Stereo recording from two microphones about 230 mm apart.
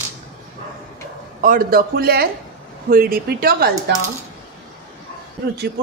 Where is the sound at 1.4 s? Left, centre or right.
Right.